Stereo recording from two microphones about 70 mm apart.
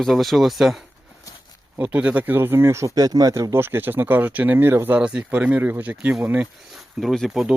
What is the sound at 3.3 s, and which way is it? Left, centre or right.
Speech, right.